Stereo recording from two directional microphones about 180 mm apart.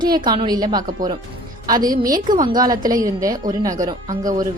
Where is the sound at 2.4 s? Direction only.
20° right (ahead or behind).